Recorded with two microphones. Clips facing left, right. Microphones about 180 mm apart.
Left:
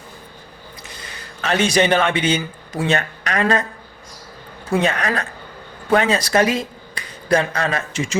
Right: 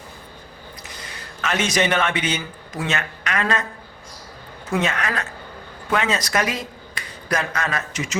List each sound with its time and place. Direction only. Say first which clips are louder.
1.4 s a man's voice: left 4 dB; 30° left (ahead or behind)
4.7 s a man's voice: left 4 dB; 35° left (ahead or behind)